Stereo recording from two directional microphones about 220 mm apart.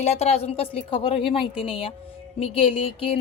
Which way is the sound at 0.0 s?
30° left (ahead or behind).